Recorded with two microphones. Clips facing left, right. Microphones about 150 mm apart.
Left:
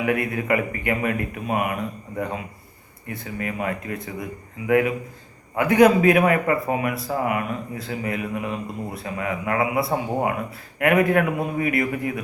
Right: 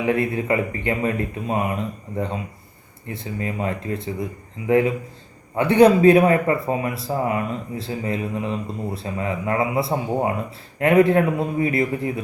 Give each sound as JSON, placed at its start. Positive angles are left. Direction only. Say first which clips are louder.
{"t": 0.0, "sound": "a man's voice", "louder": "right 2 dB", "side_deg": -25}